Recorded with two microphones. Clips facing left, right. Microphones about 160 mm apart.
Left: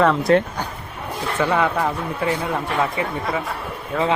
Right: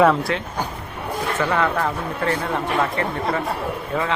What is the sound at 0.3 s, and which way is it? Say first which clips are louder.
Speech: left 9 dB; 35° left (ahead or behind).